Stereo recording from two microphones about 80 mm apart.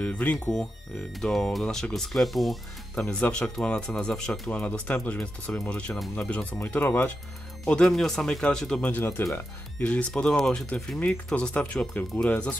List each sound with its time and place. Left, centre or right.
0.0 s speech: centre
1.2 s speech: centre
3.0 s speech: centre
6.6 s speech: left
7.6 s speech: centre
8.9 s speech: left
9.8 s speech: centre